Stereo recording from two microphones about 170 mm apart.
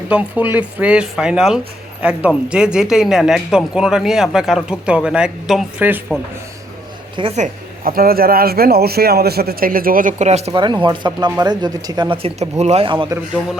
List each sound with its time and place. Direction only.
0.1 s speech: 10° right (ahead or behind)
7.2 s a woman's voice: 40° right (ahead or behind)
7.9 s a man's voice: 60° right (ahead or behind); by 10.5 s 40° right (ahead or behind)
10.5 s speech: 25° right (ahead or behind)